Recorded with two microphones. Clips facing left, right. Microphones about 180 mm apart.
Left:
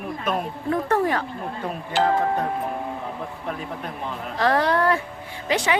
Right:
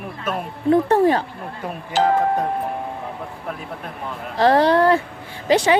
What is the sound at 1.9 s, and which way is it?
Speech, 40° right (ahead or behind).